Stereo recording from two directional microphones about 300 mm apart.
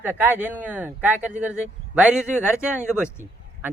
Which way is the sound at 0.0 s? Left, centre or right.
Centre.